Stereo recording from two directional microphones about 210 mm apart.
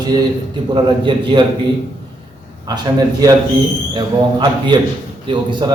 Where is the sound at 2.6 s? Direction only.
20° right (ahead or behind).